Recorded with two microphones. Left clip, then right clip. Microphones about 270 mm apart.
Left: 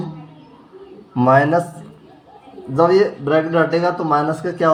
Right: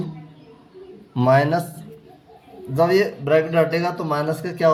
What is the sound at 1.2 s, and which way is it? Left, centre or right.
Speech, right.